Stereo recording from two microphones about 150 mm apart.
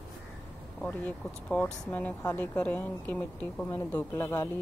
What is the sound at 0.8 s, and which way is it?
Speech, 10° left (ahead or behind).